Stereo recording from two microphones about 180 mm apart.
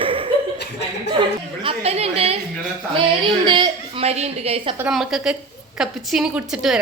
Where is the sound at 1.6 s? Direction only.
35° right (ahead or behind).